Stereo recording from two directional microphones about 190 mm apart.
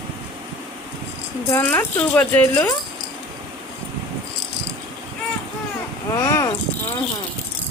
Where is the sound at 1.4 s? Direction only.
10° left (ahead or behind).